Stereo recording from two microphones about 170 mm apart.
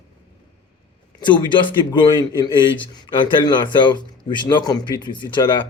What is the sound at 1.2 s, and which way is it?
Speech, 30° left (ahead or behind).